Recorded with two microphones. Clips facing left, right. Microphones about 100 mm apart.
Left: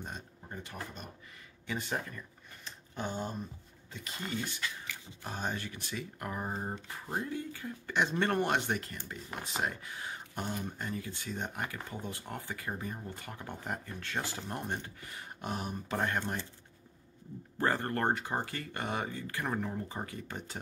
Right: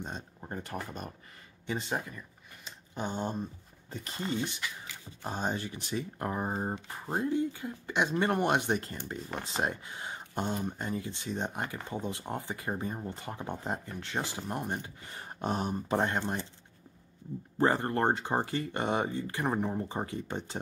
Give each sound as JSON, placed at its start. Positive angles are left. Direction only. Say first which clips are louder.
{"t": 0.5, "sound": "speech", "louder": "right 5 dB", "side_deg": -45}
{"t": 1.7, "sound": "speech", "louder": "right 3 dB", "side_deg": -20}
{"t": 2.0, "sound": "a sound", "louder": "right 1 dB", "side_deg": -15}
{"t": 3.9, "sound": "speech", "louder": "right 4 dB", "side_deg": -35}
{"t": 15.1, "sound": "speech", "louder": "right 6 dB", "side_deg": -35}
{"t": 17.6, "sound": "speech", "louder": "right 4 dB", "side_deg": -20}